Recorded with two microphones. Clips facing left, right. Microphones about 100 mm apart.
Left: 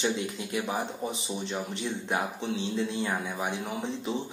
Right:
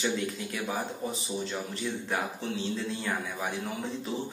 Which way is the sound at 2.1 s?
20° left (ahead or behind).